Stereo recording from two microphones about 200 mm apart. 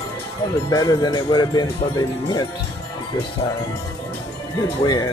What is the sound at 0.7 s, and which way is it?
Speech, 20° left (ahead or behind).